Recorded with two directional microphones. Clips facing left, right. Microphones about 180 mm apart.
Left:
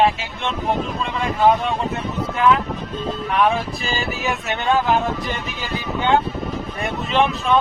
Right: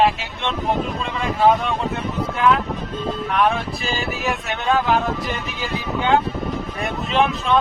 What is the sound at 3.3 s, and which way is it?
Speech, centre (ahead or behind).